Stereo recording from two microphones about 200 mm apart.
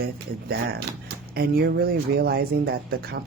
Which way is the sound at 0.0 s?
50° right (ahead or behind).